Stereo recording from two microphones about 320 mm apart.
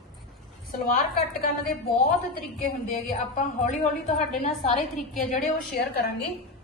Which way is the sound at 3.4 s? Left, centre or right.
Left.